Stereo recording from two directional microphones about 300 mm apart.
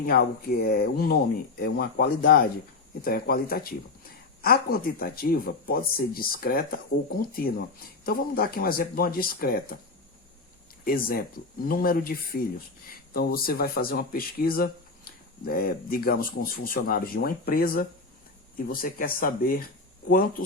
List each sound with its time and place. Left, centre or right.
0.0 s speech: left
10.8 s speech: left